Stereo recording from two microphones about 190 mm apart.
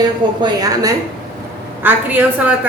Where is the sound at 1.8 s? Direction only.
10° right (ahead or behind).